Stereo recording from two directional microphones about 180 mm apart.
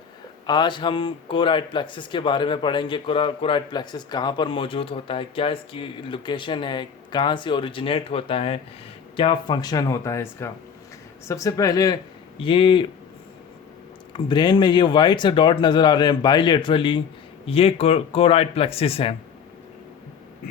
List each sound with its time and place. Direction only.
0.4 s speech: 25° left (ahead or behind)
14.1 s speech: 25° left (ahead or behind)